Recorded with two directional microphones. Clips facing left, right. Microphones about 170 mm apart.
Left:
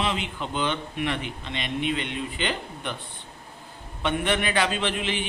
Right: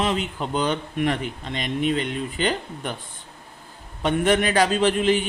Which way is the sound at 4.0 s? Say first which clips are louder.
Right 5 dB; 40° right (ahead or behind).